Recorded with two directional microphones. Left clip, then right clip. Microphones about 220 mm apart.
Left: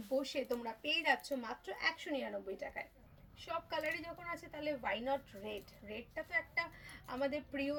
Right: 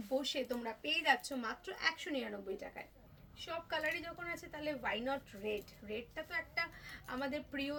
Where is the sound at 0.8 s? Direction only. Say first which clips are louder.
Right 1 dB; 20° right (ahead or behind).